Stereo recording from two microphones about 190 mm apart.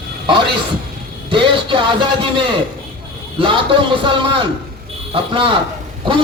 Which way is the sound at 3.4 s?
25° right (ahead or behind).